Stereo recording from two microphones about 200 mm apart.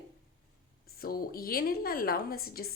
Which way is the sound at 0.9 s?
45° left (ahead or behind).